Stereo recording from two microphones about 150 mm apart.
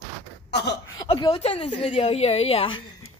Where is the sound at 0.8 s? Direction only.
30° left (ahead or behind).